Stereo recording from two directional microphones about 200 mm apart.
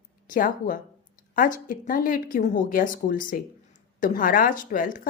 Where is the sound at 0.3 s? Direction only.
45° left (ahead or behind).